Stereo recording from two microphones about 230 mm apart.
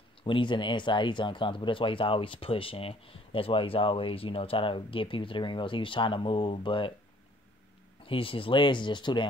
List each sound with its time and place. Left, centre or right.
0.2 s speech: left
8.0 s speech: left